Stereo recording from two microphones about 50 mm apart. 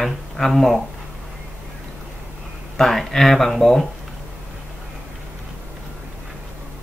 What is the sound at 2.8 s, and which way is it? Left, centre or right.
Speech, centre.